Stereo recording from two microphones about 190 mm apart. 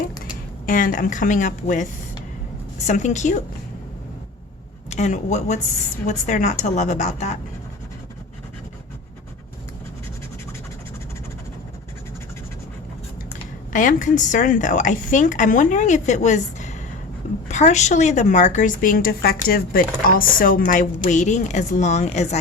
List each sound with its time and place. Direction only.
0.6 s a woman's voice: 45° left (ahead or behind)
4.9 s a woman's voice: 40° left (ahead or behind)
13.7 s a woman's voice: 45° left (ahead or behind)